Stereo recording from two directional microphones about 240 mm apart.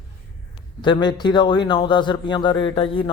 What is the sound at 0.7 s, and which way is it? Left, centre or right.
A man's voice, centre.